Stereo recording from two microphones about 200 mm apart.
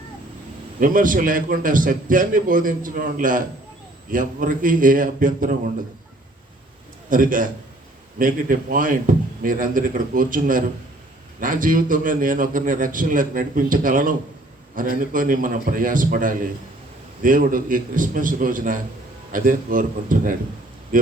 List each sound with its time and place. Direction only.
0.8 s a man's voice: 40° right (ahead or behind)
7.1 s a man's voice: 45° right (ahead or behind)